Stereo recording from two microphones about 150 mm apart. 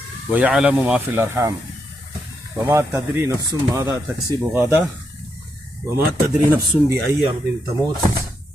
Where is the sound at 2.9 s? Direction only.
20° right (ahead or behind).